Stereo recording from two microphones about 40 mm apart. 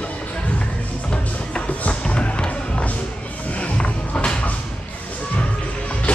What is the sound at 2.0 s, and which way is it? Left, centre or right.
Music, left.